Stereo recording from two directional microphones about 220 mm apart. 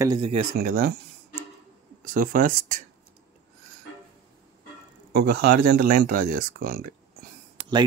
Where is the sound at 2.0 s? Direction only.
40° right (ahead or behind).